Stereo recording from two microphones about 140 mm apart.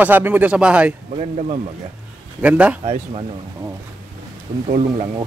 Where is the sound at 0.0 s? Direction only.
15° right (ahead or behind).